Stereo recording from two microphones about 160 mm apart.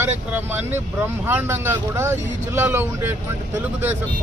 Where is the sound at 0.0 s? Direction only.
10° right (ahead or behind).